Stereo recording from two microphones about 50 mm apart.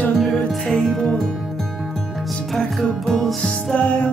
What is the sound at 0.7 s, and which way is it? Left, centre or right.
Music, centre.